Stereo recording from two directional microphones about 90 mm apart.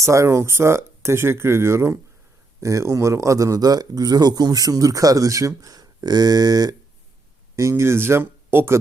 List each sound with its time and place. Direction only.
0.0 s a man's voice: 35° right (ahead or behind)
7.5 s speech: 35° right (ahead or behind)